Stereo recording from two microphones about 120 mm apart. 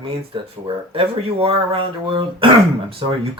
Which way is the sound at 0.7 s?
50° right (ahead or behind).